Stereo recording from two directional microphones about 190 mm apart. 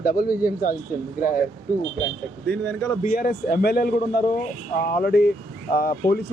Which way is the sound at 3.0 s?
50° left (ahead or behind).